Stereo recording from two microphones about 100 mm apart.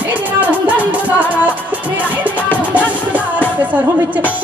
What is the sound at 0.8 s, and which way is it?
Music, 15° right (ahead or behind).